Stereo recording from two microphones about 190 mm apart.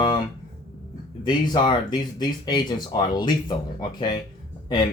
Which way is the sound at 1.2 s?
25° left (ahead or behind).